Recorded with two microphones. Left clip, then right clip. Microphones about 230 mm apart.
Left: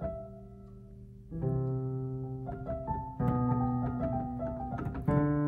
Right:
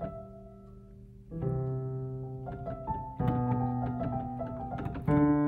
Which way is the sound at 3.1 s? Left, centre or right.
Right.